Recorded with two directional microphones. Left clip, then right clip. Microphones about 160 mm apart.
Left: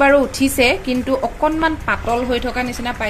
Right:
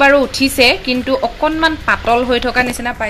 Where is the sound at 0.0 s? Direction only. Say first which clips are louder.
Right 3 dB; 5° left (ahead or behind).